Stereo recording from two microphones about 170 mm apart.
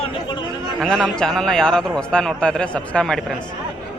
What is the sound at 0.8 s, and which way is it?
A man's voice, centre (ahead or behind).